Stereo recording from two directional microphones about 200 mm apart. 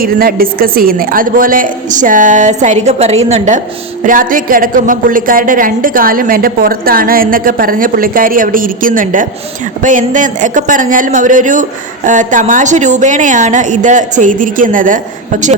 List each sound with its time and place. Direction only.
0.0 s a woman's voice: 50° right (ahead or behind)